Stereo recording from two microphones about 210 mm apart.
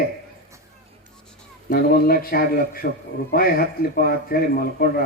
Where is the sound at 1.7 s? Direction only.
45° left (ahead or behind).